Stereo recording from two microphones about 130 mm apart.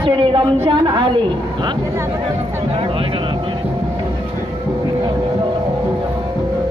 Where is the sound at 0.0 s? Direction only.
40° right (ahead or behind).